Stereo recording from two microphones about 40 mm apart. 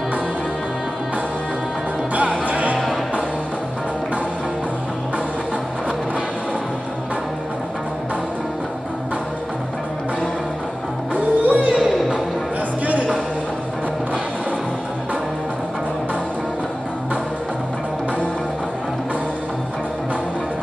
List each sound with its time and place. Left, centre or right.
2.4 s music: right
11.1 s music: right
11.7 s music: centre
12.8 s a sound: right